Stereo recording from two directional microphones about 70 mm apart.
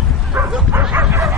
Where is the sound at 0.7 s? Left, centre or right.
Right.